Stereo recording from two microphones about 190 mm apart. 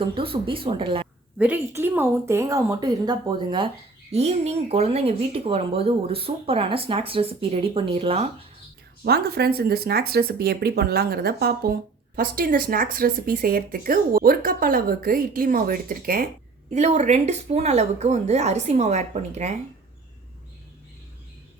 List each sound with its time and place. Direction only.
0.1 s speech: 25° right (ahead or behind)
1.4 s a woman's voice: 10° right (ahead or behind); by 8.4 s 30° right (ahead or behind)
9.0 s speech: 55° right (ahead or behind); by 19.5 s 35° right (ahead or behind)